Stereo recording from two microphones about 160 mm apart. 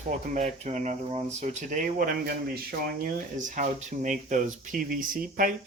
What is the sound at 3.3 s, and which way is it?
Speech, 55° right (ahead or behind).